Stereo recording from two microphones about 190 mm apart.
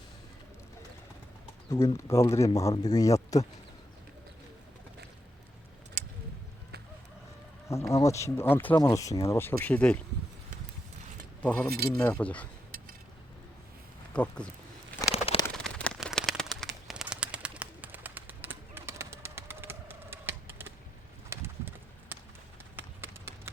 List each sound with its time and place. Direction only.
2.0 s speech: 15° left (ahead or behind)
7.7 s speech: 15° left (ahead or behind)
11.4 s speech: 10° left (ahead or behind)
11.7 s speech: 55° right (ahead or behind)
11.9 s speech: 5° left (ahead or behind)
14.1 s speech: 5° left (ahead or behind)
15.1 s bird: 30° left (ahead or behind)
15.4 s a sound: 5° left (ahead or behind)
21.2 s bird: 10° right (ahead or behind)
22.1 s run: 10° right (ahead or behind)